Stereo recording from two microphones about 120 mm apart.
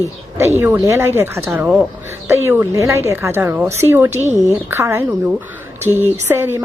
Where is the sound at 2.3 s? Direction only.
20° right (ahead or behind).